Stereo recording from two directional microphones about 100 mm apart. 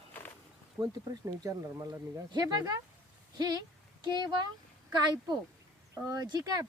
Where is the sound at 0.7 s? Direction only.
35° right (ahead or behind).